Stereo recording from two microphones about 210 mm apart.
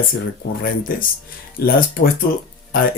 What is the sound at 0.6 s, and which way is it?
Speech, 40° left (ahead or behind).